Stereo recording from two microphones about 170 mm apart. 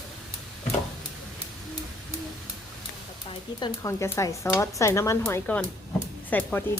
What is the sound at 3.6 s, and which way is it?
Speech, 15° left (ahead or behind).